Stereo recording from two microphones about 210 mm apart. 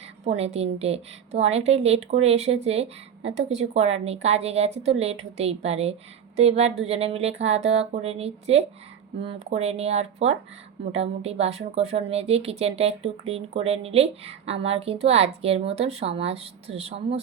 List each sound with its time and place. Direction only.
0.3 s speech: 30° right (ahead or behind)